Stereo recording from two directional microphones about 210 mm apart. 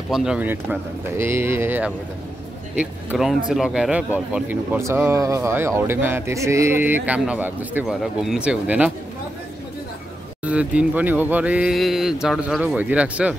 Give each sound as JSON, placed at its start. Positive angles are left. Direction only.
{"t": 0.1, "sound": "speech", "side_deg": -5}
{"t": 10.4, "sound": "speech", "side_deg": -5}